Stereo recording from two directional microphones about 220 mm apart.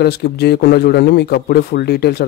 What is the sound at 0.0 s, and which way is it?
Speech, 45° left (ahead or behind).